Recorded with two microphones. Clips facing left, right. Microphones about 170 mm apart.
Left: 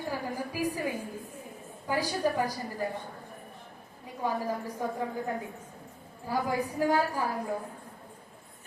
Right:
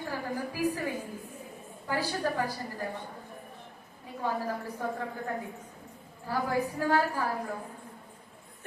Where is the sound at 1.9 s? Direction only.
15° left (ahead or behind).